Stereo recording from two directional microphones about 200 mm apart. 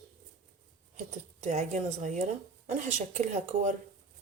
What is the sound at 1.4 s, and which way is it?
A woman's voice, 35° right (ahead or behind).